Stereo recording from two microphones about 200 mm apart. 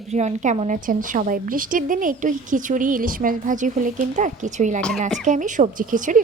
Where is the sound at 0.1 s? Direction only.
35° right (ahead or behind).